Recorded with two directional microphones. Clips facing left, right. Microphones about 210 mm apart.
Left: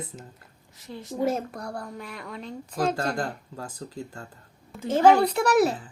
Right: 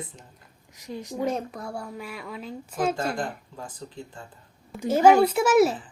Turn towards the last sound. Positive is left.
turn(degrees=-5)  # may be behind; listen again after turning